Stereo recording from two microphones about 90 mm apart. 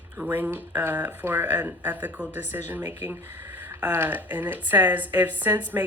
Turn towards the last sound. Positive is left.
turn(degrees=-20)  # may be behind; listen again after turning